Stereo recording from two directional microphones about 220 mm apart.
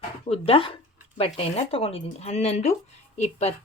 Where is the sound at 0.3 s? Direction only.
25° left (ahead or behind).